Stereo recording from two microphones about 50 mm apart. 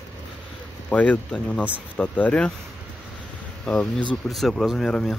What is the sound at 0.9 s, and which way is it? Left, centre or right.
Speech, left.